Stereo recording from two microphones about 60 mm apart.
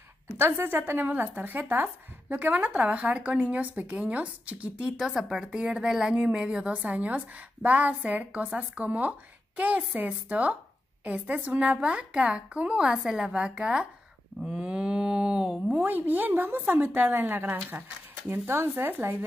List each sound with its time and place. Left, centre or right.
0.4 s a woman's voice: right; by 15.5 s centre
15.8 s a woman's voice: right